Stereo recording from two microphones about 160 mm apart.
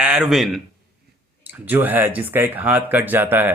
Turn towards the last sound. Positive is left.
turn(degrees=-15)  # may be behind; listen again after turning